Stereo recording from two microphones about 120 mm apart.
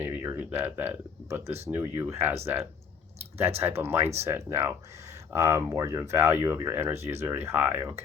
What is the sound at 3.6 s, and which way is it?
Speech, 20° right (ahead or behind).